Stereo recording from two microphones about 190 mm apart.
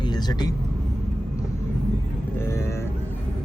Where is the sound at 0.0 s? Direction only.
20° left (ahead or behind).